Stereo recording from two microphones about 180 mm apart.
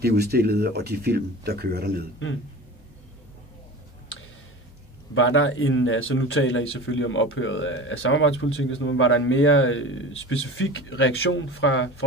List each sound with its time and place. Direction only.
0.0 s speech: 60° right (ahead or behind)
5.1 s speech: 90° left